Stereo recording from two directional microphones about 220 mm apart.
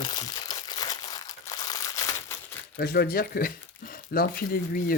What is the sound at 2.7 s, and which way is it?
Speech, 45° left (ahead or behind).